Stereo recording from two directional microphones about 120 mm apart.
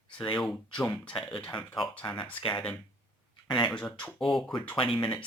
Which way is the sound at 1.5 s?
45° left (ahead or behind).